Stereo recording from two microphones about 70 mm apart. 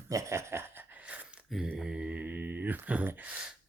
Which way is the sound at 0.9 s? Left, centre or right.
Centre.